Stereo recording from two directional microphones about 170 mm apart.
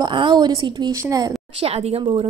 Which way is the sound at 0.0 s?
25° right (ahead or behind).